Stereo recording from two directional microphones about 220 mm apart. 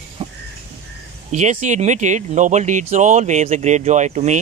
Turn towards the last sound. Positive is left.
turn(degrees=-30)  # may be behind; listen again after turning